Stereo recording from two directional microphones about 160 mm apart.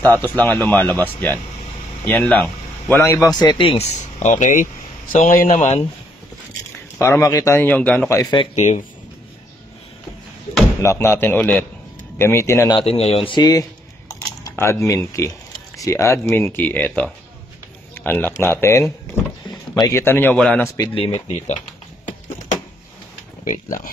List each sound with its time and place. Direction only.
0.2 s speech: 10° left (ahead or behind); by 3.8 s 30° left (ahead or behind)
4.0 s speech: 50° left (ahead or behind)
7.0 s speech: 20° left (ahead or behind)
8.1 s speech: 20° left (ahead or behind)
8.5 s speech: 50° left (ahead or behind)
10.8 s speech: 15° left (ahead or behind)
12.7 s speech: 40° left (ahead or behind); by 14.5 s 20° left (ahead or behind)
14.5 s camera: 15° left (ahead or behind)
15.1 s a man's voice: 20° left (ahead or behind)
20.3 s a man's voice: 5° left (ahead or behind)
20.6 s speech: 20° left (ahead or behind)
20.9 s speech: 40° left (ahead or behind)
23.4 s speech: 55° left (ahead or behind)